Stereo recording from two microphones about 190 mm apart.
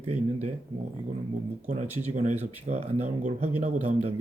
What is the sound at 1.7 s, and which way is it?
Speech, 40° right (ahead or behind).